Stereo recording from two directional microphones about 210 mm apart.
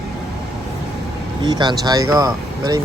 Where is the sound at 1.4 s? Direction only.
20° right (ahead or behind).